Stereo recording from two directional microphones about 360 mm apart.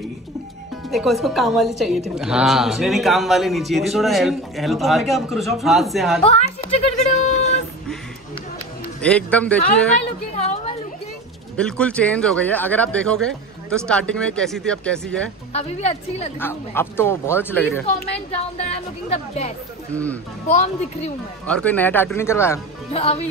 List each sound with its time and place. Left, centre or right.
0.9 s a man's voice: centre
6.2 s a sound: centre
9.0 s a man's voice: centre
10.3 s a sound: centre
11.5 s a man's voice: centre
15.5 s speech: centre
16.3 s a man's voice: centre
18.3 s speech: centre
19.9 s a man's voice: centre
20.4 s speech: centre
21.5 s speech: centre